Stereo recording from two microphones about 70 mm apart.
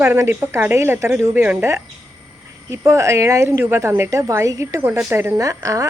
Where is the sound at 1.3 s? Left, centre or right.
Right.